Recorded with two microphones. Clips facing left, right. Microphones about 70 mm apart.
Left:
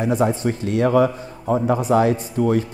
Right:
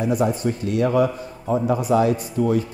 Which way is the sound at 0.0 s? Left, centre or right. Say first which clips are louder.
Left 1 dB; left.